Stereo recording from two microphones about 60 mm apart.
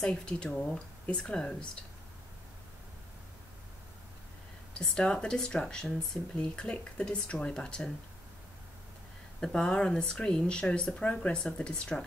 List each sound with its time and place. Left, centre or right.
0.0 s speech: centre
4.7 s speech: centre
9.4 s speech: centre